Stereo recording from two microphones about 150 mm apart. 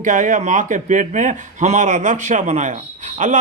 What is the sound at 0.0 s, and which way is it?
A man's voice, 55° right (ahead or behind).